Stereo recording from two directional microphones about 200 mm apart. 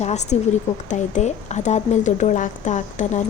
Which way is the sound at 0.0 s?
35° left (ahead or behind).